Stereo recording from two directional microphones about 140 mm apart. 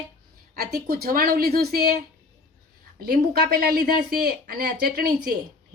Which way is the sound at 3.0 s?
90° right.